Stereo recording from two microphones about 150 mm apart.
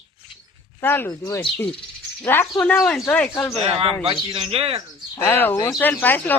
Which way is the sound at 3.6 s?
40° right (ahead or behind).